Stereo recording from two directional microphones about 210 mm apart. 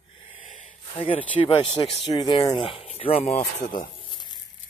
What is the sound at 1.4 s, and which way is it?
Speech, 25° left (ahead or behind).